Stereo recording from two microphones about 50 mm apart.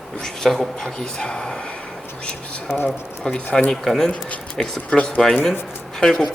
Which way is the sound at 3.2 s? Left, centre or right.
Centre.